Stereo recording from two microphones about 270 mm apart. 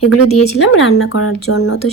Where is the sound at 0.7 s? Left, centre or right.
Left.